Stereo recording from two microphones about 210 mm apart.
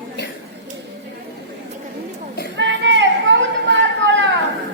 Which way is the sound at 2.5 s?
60° right (ahead or behind).